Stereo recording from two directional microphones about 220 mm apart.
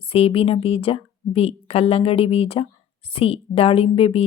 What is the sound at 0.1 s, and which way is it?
A woman's voice, 25° left (ahead or behind).